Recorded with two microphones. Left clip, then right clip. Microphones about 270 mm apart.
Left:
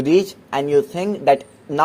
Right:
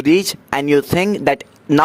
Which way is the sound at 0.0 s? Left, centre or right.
Right.